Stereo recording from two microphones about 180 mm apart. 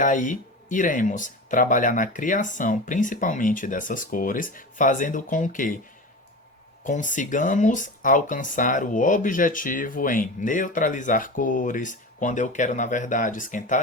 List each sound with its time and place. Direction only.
0.0 s speech: 45° left (ahead or behind)
6.8 s speech: 45° left (ahead or behind)